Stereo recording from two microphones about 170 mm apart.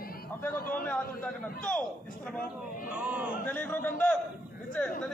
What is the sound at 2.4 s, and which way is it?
Speech, 55° left (ahead or behind).